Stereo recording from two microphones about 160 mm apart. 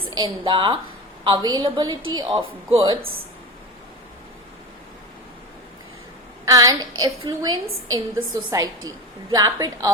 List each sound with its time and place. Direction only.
0.2 s a woman's voice: 30° right (ahead or behind)
6.4 s a woman's voice: 20° right (ahead or behind)